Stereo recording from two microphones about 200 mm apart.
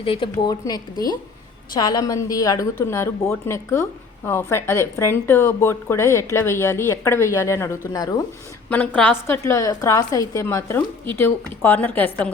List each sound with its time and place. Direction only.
0.0 s speech: 25° left (ahead or behind)
8.7 s speech: 10° left (ahead or behind)